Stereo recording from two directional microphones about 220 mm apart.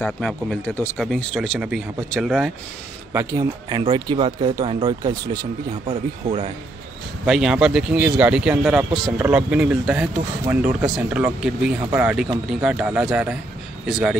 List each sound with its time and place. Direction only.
0.0 s speech: 5° left (ahead or behind)
3.1 s speech: 10° right (ahead or behind)
7.2 s speech: 5° right (ahead or behind)